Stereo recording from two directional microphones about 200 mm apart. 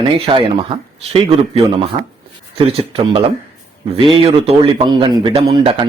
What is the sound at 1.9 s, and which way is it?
A man's voice, 25° right (ahead or behind).